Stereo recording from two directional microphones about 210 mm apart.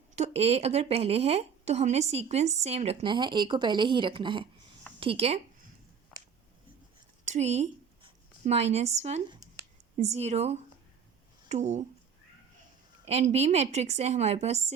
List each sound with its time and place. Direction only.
0.2 s a woman's voice: 30° right (ahead or behind)
7.3 s speech: 30° right (ahead or behind)
13.1 s speech: 30° right (ahead or behind)